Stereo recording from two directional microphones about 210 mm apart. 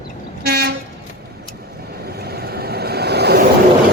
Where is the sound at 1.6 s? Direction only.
45° right (ahead or behind).